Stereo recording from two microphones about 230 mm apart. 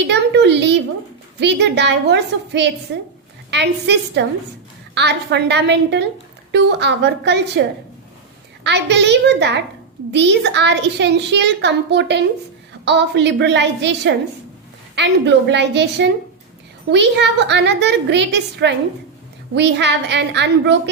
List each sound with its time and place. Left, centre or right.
0.1 s a child's voice: right
8.6 s a child's voice: right